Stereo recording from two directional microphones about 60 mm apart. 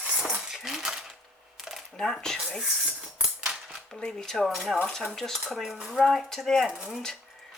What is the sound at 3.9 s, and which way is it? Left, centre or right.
Speech, centre.